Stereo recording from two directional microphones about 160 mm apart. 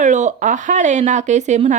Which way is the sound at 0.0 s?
50° right (ahead or behind).